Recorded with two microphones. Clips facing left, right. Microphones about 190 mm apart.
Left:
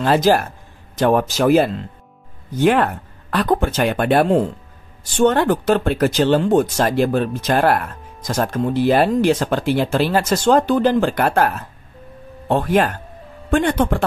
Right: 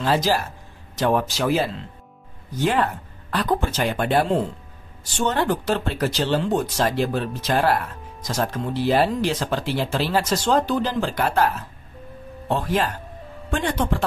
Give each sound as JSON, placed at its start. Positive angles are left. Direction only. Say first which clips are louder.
{"t": 0.0, "sound": "speech", "louder": "left 6 dB", "side_deg": 55}